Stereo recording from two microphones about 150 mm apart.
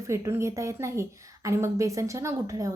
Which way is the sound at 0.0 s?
20° right (ahead or behind).